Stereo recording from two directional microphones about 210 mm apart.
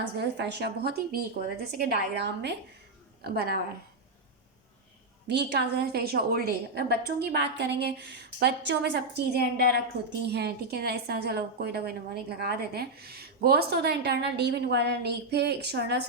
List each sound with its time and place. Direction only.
0.2 s a woman's voice: 55° right (ahead or behind)
5.3 s a woman's voice: 55° right (ahead or behind)